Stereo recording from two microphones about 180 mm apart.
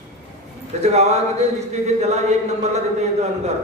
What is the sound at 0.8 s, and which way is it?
A man's voice, 40° right (ahead or behind).